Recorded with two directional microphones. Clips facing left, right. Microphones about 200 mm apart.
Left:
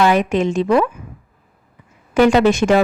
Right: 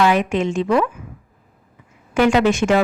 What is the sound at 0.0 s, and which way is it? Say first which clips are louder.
Speech: left 2 dB; 40° left (ahead or behind).